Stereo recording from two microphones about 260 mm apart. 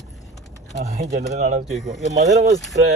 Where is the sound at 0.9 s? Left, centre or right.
Right.